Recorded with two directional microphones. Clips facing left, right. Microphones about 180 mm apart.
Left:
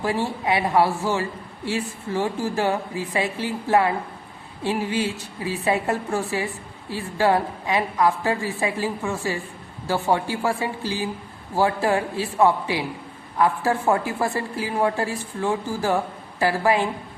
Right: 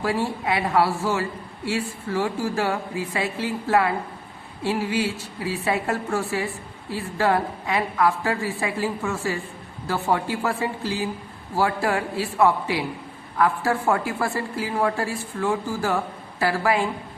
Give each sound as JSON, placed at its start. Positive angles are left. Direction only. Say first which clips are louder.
{"t": 0.4, "sound": "a woman's voice", "louder": "left 2 dB", "side_deg": 15}